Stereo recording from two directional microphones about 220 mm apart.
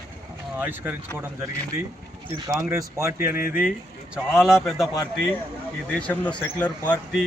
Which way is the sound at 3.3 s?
40° left (ahead or behind).